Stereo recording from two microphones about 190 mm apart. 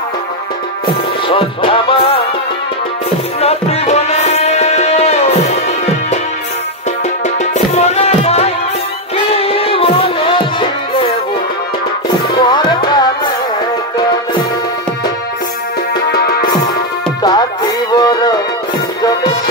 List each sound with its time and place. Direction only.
1.3 s music: 30° left (ahead or behind)
3.3 s music: 35° left (ahead or behind)
7.2 s music: 35° left (ahead or behind)
12.4 s music: 25° left (ahead or behind)
16.1 s music: 60° left (ahead or behind)
17.2 s music: 20° left (ahead or behind)